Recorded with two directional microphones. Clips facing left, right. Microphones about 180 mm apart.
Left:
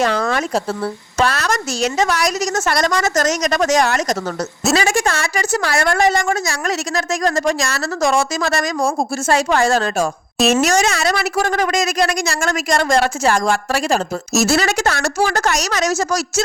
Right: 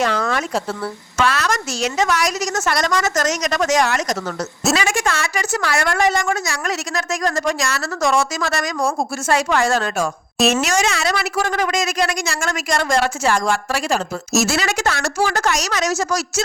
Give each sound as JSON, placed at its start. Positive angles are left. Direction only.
{"t": 0.0, "sound": "speech", "side_deg": 35}